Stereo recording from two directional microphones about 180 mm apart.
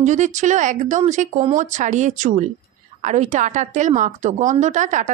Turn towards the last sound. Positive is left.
turn(degrees=-45)  # may be behind; listen again after turning